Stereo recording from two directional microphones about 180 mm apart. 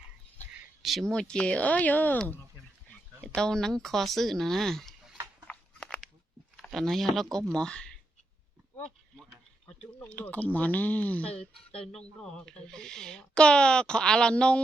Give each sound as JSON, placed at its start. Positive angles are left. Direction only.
{"t": 0.8, "sound": "speech", "side_deg": 0}
{"t": 5.5, "sound": "a sound", "side_deg": 5}
{"t": 6.6, "sound": "speech", "side_deg": 0}
{"t": 9.1, "sound": "speech", "side_deg": 5}